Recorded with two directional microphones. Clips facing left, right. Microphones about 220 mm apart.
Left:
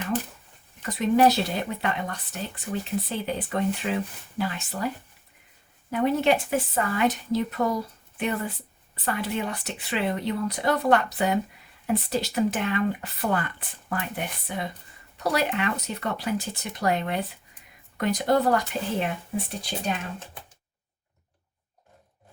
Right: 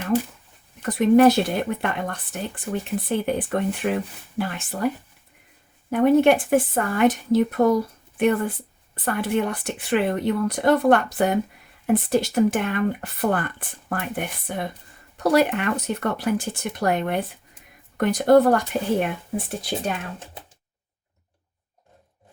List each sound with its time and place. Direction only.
0.1 s speech: 10° right (ahead or behind)
0.8 s speech: 55° right (ahead or behind)
5.9 s speech: 50° right (ahead or behind)